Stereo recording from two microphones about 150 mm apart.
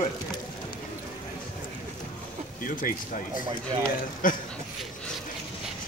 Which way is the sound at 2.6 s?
65° left (ahead or behind).